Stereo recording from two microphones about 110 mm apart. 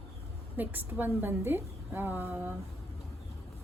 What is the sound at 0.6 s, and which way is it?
A woman's voice, 15° right (ahead or behind).